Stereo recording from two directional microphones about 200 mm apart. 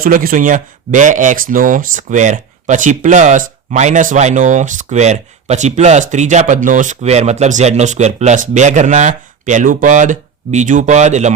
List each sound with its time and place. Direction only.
0.0 s speech: 45° right (ahead or behind)